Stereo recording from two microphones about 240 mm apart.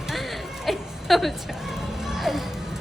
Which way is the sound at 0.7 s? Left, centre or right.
Centre.